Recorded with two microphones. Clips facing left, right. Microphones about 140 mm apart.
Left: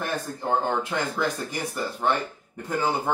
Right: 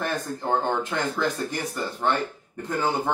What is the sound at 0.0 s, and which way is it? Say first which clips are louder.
Speech: right 1 dB; 10° left (ahead or behind).